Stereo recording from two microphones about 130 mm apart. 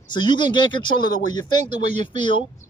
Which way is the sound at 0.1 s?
35° left (ahead or behind).